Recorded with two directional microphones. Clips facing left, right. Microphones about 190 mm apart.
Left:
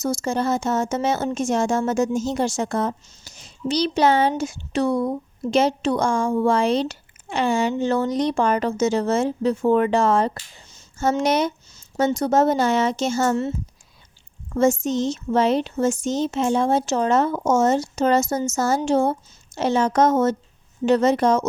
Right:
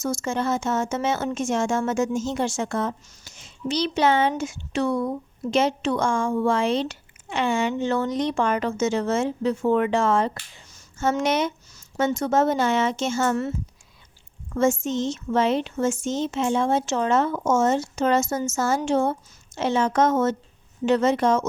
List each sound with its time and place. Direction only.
0.0 s a woman's voice: 35° left (ahead or behind)
14.5 s a woman's voice: 35° left (ahead or behind)